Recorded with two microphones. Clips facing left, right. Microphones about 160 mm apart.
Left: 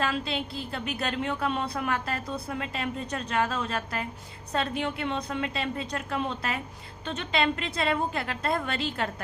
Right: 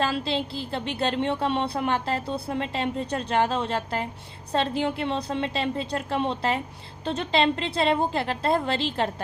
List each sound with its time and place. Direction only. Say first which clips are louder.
0.0 s a woman's voice: right 3 dB; 30° right (ahead or behind)